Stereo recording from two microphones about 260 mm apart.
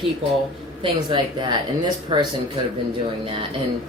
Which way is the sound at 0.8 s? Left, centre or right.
Centre.